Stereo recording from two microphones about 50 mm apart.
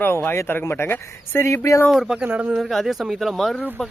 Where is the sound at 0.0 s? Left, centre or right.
Left.